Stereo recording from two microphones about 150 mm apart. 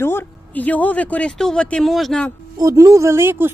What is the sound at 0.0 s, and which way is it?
Speech, 15° left (ahead or behind).